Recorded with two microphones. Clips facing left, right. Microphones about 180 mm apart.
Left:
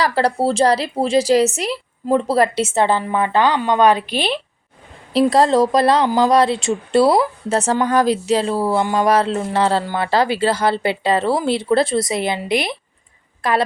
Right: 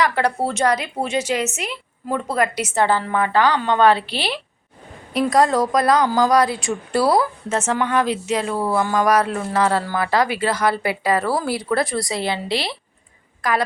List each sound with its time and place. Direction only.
0.0 s speech: 35° left (ahead or behind)
7.5 s speech: 35° left (ahead or behind)